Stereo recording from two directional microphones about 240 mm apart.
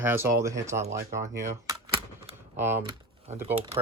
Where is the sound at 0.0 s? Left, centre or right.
Centre.